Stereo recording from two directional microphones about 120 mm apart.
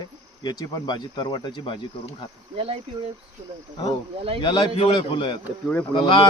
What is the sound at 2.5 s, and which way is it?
Speech, 55° right (ahead or behind).